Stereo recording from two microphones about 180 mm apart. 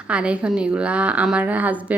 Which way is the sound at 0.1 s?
5° right (ahead or behind).